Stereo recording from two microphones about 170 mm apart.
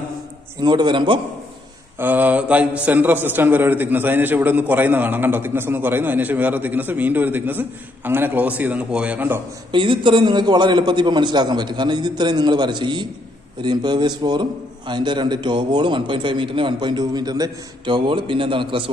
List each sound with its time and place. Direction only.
0.6 s a man's voice: 25° right (ahead or behind)
2.0 s a man's voice: 10° right (ahead or behind)
9.7 s a man's voice: 30° right (ahead or behind)